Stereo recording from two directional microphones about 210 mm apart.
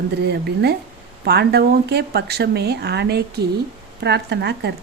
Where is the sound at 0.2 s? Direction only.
50° right (ahead or behind).